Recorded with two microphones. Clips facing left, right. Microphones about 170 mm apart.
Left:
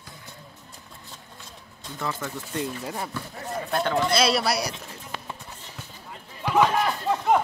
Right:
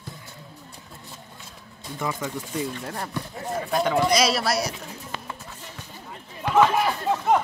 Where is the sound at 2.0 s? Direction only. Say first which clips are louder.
Right 2 dB; 10° right (ahead or behind).